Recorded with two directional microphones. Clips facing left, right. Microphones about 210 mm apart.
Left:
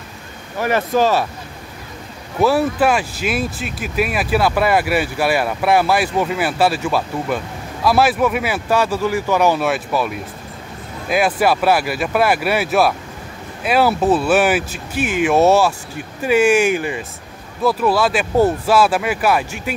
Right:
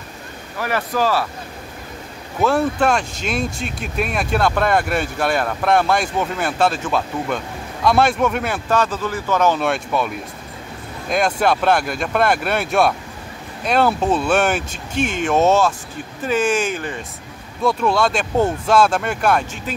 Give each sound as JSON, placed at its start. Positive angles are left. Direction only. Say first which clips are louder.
{"t": 0.6, "sound": "speech", "louder": "left 4 dB", "side_deg": 20}
{"t": 2.4, "sound": "speech", "louder": "left 2 dB", "side_deg": 5}